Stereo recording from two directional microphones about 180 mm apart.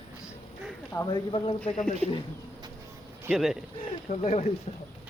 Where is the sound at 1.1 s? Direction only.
25° left (ahead or behind).